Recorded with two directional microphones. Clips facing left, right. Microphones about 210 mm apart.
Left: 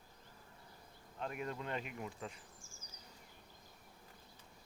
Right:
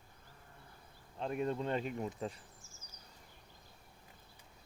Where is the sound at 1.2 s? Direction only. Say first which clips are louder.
Right 7 dB; 30° right (ahead or behind).